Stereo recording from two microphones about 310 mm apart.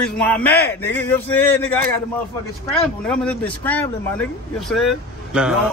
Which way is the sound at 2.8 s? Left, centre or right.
Centre.